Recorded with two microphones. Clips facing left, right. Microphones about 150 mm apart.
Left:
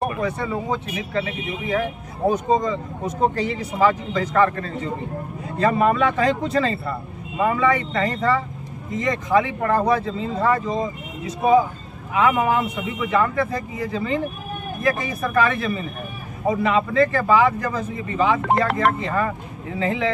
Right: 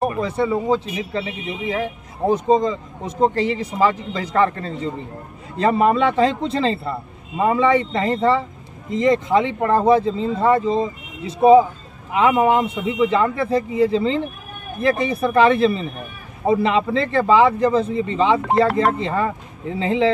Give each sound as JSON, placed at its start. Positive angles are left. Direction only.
{"t": 0.0, "sound": "speech", "side_deg": -30}